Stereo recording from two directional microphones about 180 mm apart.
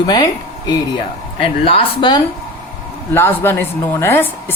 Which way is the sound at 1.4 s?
30° left (ahead or behind).